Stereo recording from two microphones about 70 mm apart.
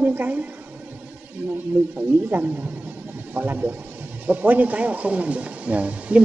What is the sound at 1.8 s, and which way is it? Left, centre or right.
Speech, right.